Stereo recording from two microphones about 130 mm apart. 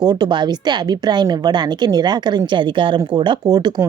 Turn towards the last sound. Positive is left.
turn(degrees=-30)  # may be behind; listen again after turning